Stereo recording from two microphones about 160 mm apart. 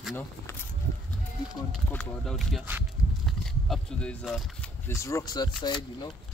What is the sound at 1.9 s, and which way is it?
Speech, 5° left (ahead or behind).